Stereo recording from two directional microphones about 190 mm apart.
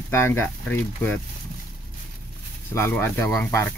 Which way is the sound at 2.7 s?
15° left (ahead or behind).